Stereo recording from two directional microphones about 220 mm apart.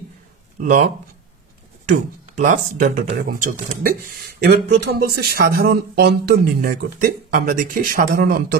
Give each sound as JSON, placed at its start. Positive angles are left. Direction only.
{"t": 0.6, "sound": "speech", "side_deg": -40}
{"t": 2.3, "sound": "speech", "side_deg": -35}